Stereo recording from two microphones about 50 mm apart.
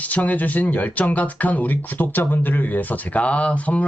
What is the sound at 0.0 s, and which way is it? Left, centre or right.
Speech, left.